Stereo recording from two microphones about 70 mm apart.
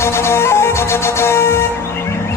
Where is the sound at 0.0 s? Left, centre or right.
Left.